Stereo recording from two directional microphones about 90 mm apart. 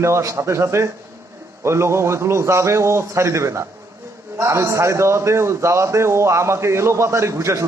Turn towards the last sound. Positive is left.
turn(degrees=-35)  # may be behind; listen again after turning